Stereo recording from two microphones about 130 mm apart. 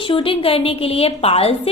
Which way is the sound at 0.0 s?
45° left (ahead or behind).